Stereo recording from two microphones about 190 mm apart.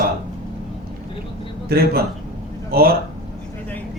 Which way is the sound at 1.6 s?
55° right (ahead or behind).